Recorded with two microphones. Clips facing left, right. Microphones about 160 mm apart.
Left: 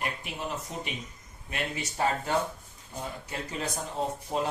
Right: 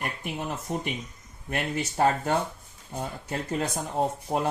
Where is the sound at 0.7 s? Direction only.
55° right (ahead or behind).